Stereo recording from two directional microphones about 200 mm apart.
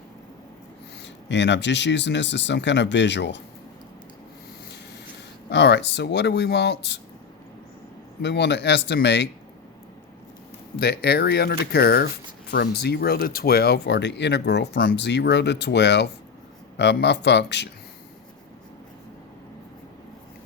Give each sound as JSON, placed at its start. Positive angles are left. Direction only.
{"t": 1.0, "sound": "speech", "side_deg": 60}
{"t": 5.5, "sound": "speech", "side_deg": 55}
{"t": 8.2, "sound": "speech", "side_deg": 60}
{"t": 10.8, "sound": "speech", "side_deg": 50}